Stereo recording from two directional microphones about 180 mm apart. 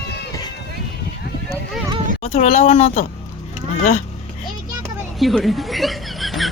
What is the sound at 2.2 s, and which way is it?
Speech, 35° left (ahead or behind).